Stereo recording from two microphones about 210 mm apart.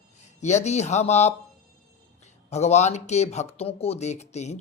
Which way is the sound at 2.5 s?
30° left (ahead or behind).